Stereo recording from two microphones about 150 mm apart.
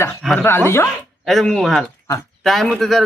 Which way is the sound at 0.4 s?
15° left (ahead or behind).